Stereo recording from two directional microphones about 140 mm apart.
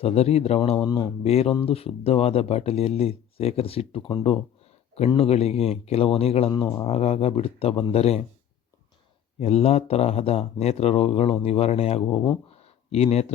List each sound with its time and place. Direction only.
0.0 s speech: 45° left (ahead or behind)
6.5 s speech: 25° left (ahead or behind)
6.8 s speech: 45° left (ahead or behind)
9.4 s speech: 50° left (ahead or behind)
12.5 s a sound: 45° left (ahead or behind)